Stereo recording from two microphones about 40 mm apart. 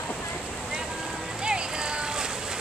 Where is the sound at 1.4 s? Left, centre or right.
Right.